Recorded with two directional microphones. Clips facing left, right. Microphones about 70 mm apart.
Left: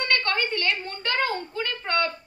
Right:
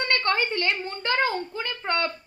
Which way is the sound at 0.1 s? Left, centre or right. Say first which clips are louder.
Right 1 dB; right.